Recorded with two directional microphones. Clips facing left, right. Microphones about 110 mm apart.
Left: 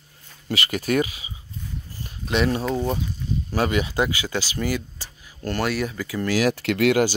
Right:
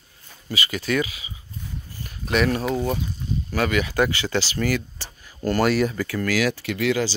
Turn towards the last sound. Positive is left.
turn(degrees=60)  # may be behind; listen again after turning